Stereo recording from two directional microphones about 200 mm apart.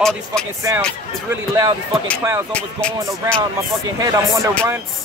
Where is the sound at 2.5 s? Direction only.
5° left (ahead or behind).